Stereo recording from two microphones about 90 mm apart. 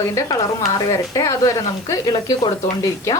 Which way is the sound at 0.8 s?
40° left (ahead or behind).